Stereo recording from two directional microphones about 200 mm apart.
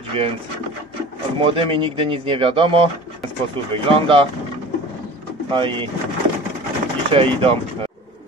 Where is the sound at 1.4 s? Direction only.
25° right (ahead or behind).